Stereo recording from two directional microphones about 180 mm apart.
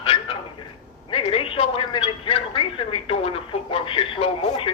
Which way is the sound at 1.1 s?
30° left (ahead or behind).